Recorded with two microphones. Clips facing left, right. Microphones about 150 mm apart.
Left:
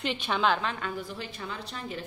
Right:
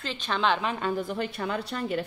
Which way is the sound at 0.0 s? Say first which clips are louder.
Even; 15° left (ahead or behind).